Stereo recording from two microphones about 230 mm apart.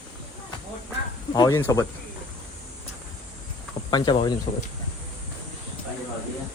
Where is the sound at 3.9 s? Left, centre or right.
Centre.